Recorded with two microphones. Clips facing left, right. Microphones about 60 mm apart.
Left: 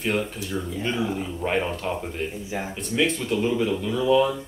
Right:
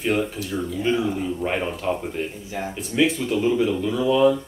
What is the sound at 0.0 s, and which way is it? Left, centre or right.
Speech, centre.